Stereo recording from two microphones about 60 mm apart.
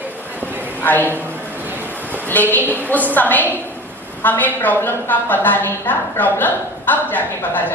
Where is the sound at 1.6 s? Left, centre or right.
Right.